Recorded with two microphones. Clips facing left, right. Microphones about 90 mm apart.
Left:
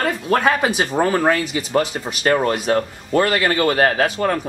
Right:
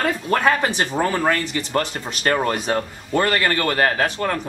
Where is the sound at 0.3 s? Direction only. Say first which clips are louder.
Left 2 dB; 5° left (ahead or behind).